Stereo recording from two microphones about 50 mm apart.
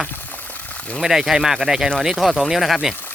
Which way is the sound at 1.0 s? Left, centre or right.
Centre.